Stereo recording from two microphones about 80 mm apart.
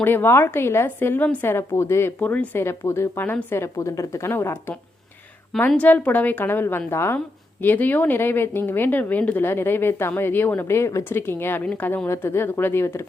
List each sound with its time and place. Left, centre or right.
0.0 s speech: left
2.3 s speech: centre
2.6 s speech: left
4.3 s speech: left
11.6 s speech: centre
12.0 s speech: left